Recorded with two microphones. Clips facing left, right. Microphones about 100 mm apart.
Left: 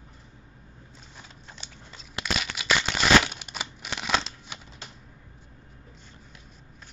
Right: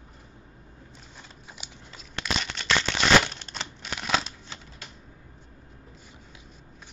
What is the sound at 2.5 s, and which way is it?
Crumpling, 5° left (ahead or behind).